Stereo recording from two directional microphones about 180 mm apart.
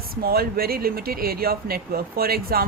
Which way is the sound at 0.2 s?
55° right (ahead or behind).